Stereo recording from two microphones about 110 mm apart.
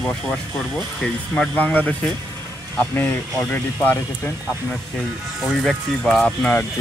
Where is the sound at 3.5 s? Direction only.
15° left (ahead or behind).